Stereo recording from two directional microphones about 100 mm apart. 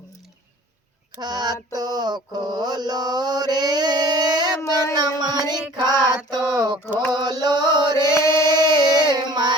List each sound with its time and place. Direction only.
1.2 s mantra: 45° right (ahead or behind)
4.6 s a sound: 30° left (ahead or behind)
4.9 s music: 45° right (ahead or behind)
5.7 s child singing: 45° right (ahead or behind)
6.3 s mantra: 45° right (ahead or behind)
8.1 s chant: 30° left (ahead or behind)
8.8 s a sound: 45° right (ahead or behind)